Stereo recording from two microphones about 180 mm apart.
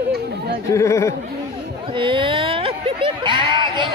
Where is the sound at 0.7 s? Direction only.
15° left (ahead or behind).